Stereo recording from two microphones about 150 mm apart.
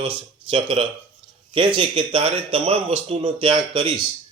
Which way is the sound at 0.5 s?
35° right (ahead or behind).